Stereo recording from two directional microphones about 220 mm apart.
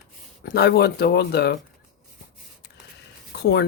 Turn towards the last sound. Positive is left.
turn(degrees=50)  # may be behind; listen again after turning